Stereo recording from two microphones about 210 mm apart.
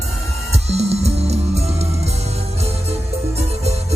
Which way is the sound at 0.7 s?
30° right (ahead or behind).